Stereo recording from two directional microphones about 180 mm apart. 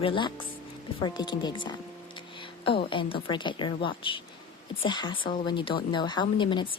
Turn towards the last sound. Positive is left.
turn(degrees=25)  # may be behind; listen again after turning